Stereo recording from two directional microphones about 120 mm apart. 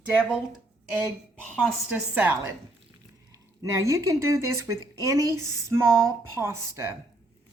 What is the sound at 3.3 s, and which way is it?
Speech, 25° right (ahead or behind).